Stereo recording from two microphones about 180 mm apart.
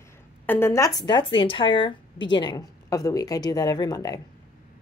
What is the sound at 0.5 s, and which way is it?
Speech, 15° left (ahead or behind).